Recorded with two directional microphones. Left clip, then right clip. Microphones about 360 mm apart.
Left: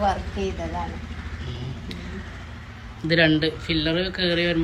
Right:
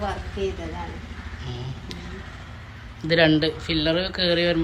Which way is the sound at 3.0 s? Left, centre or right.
Centre.